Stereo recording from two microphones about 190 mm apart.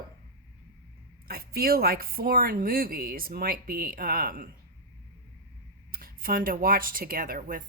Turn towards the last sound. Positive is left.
turn(degrees=-50)  # may be behind; listen again after turning